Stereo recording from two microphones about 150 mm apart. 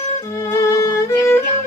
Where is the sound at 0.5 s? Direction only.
20° left (ahead or behind).